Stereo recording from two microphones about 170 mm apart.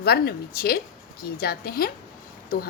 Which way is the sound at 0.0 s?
65° left (ahead or behind).